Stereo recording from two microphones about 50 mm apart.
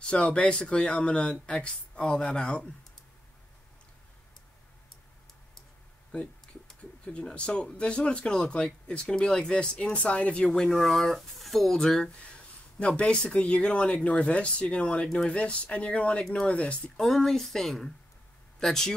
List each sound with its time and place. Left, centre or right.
0.0 s speech: centre
6.8 s speech: left
10.7 s speech: centre
12.7 s speech: left
16.9 s speech: centre